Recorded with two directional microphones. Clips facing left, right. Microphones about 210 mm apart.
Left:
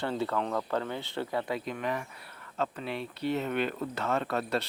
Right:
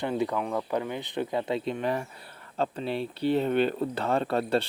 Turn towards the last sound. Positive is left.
turn(degrees=-30)  # may be behind; listen again after turning